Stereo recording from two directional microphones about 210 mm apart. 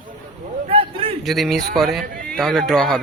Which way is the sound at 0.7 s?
25° right (ahead or behind).